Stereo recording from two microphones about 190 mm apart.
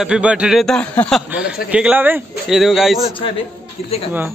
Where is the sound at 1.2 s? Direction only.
5° right (ahead or behind).